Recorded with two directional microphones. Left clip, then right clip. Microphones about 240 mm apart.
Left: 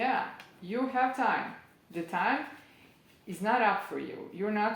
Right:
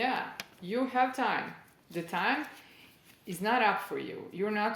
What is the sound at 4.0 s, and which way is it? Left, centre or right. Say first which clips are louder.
Speech: right 1 dB; right.